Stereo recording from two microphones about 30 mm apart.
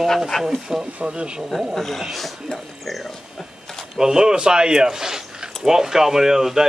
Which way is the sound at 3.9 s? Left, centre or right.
Right.